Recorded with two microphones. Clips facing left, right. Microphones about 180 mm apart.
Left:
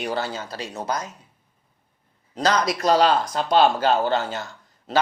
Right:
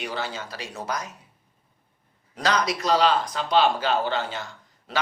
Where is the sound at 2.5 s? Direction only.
45° left (ahead or behind).